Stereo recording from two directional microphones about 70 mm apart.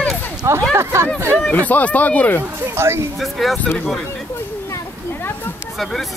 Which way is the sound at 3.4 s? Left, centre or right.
Centre.